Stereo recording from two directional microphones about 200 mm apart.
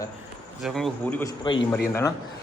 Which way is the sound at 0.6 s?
Centre (ahead or behind).